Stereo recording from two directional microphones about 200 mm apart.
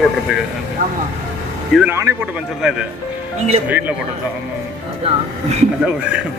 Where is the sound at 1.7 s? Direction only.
5° right (ahead or behind).